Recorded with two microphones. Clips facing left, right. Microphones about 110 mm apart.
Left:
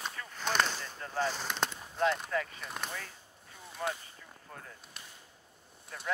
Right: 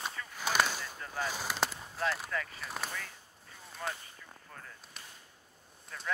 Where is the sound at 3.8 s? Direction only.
30° left (ahead or behind).